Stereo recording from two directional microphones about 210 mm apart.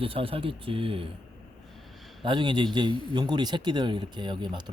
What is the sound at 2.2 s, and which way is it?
A man's voice, 20° right (ahead or behind).